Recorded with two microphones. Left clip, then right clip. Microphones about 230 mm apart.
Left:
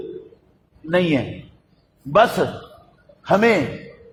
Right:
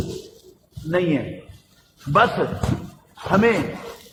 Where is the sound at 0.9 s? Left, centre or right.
Left.